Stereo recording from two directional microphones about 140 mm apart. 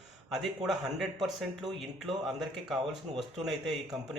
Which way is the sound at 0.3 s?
Centre (ahead or behind).